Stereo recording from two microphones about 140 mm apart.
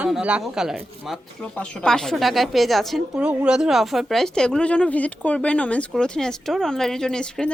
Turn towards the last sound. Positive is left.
turn(degrees=5)  # may be behind; listen again after turning